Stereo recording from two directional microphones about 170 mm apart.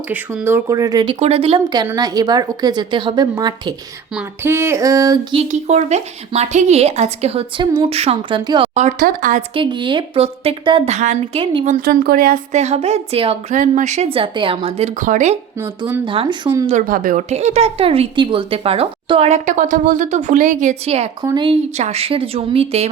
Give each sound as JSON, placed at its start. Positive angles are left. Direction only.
{"t": 0.1, "sound": "a woman's voice", "side_deg": -10}
{"t": 1.2, "sound": "a woman's voice", "side_deg": -35}
{"t": 5.4, "sound": "speech", "side_deg": -40}
{"t": 8.7, "sound": "speech", "side_deg": -45}
{"t": 9.6, "sound": "speech", "side_deg": -30}
{"t": 12.5, "sound": "speech", "side_deg": -40}
{"t": 13.5, "sound": "speech", "side_deg": -50}
{"t": 15.0, "sound": "speech", "side_deg": -45}
{"t": 15.6, "sound": "a woman's voice", "side_deg": -25}
{"t": 16.8, "sound": "speech", "side_deg": -55}
{"t": 21.2, "sound": "speech", "side_deg": -25}